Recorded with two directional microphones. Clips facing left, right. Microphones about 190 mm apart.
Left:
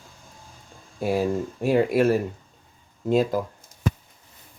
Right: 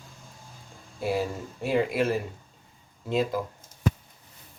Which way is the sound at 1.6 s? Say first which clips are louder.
Left 5 dB; 45° left (ahead or behind).